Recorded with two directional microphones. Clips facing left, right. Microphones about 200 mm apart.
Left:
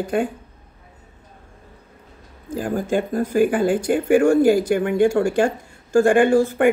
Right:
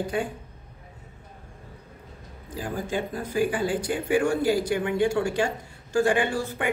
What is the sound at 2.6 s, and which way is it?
Speech, 50° left (ahead or behind).